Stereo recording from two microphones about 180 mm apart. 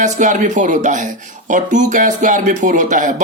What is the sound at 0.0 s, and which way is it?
A woman's voice, 45° right (ahead or behind).